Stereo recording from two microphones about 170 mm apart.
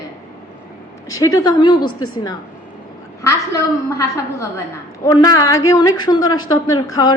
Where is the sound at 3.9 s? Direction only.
20° left (ahead or behind).